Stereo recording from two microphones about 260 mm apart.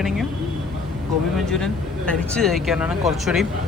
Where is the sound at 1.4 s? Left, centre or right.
Centre.